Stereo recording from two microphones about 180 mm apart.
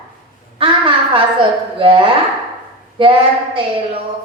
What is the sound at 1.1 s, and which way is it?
A woman's voice, 30° right (ahead or behind).